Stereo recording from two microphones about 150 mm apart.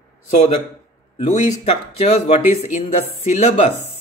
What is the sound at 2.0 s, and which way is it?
Speech, 45° left (ahead or behind).